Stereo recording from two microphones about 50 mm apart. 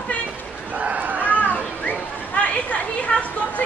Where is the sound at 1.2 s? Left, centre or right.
Left.